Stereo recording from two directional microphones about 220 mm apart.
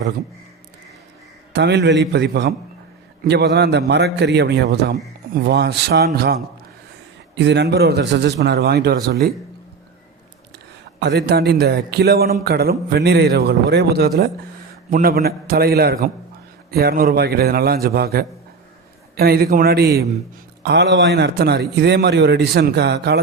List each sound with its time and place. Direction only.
1.5 s a man's voice: 50° right (ahead or behind)
11.0 s a man's voice: 50° right (ahead or behind)